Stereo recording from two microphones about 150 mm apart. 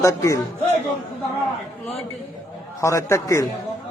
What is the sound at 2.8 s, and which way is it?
Speech, 20° left (ahead or behind).